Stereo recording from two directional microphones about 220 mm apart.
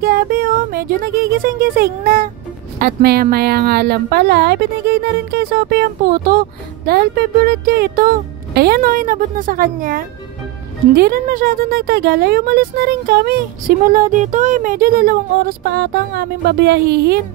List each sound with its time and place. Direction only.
0.0 s speech: 40° right (ahead or behind)